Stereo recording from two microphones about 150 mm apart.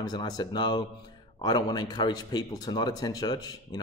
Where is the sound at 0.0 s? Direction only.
25° left (ahead or behind).